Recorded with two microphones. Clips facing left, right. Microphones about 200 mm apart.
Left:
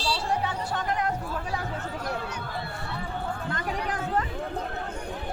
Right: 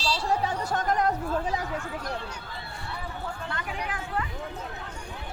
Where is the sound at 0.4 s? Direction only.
45° right (ahead or behind).